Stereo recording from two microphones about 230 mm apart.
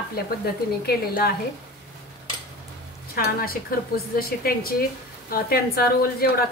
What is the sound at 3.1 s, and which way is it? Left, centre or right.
A woman's voice, left.